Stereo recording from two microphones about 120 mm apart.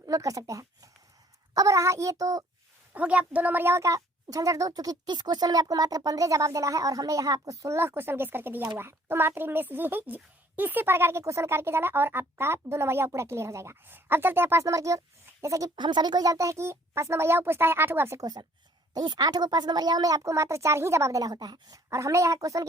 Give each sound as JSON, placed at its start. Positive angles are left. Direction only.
{"t": 0.0, "sound": "a woman's voice", "side_deg": -30}
{"t": 2.9, "sound": "a woman's voice", "side_deg": -10}
{"t": 15.7, "sound": "a woman's voice", "side_deg": -40}
{"t": 18.9, "sound": "a woman's voice", "side_deg": -35}